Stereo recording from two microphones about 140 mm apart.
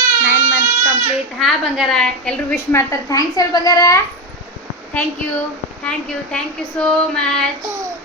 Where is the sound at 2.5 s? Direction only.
20° left (ahead or behind).